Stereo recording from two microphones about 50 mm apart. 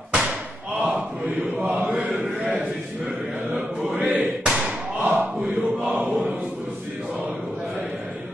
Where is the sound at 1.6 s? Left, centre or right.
Right.